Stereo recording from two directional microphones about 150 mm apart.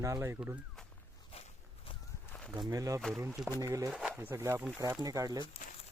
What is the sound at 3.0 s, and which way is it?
Speech, 5° left (ahead or behind).